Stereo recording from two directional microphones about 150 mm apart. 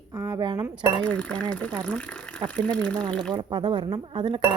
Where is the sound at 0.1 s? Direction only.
20° right (ahead or behind).